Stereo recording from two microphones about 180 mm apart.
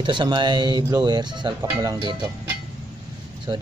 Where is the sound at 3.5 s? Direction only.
20° right (ahead or behind).